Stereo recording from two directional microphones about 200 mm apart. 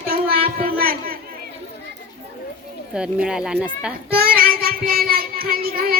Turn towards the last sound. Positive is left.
turn(degrees=-45)  # may be behind; listen again after turning